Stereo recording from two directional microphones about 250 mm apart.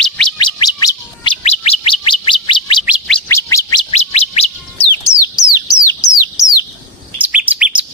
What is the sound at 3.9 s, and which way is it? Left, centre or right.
Bird, left.